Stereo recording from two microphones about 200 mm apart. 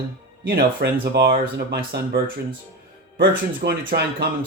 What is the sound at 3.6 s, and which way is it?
Speech, 55° right (ahead or behind).